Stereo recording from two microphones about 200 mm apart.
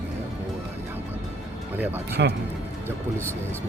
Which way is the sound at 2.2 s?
60° right (ahead or behind).